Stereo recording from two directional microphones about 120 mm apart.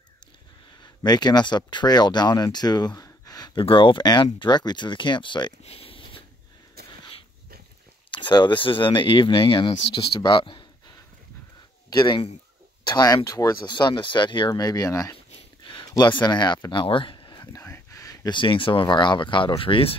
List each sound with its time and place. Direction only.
1.0 s speech: 35° left (ahead or behind)
5.6 s a sound: 55° left (ahead or behind)
8.1 s speech: 40° left (ahead or behind)
12.8 s speech: 35° left (ahead or behind); by 20.0 s 50° left (ahead or behind)